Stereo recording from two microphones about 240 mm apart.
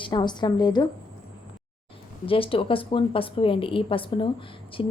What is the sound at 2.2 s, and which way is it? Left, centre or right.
A woman's voice, left.